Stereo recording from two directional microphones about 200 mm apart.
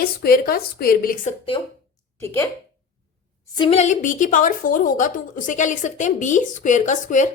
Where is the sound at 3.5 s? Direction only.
25° left (ahead or behind).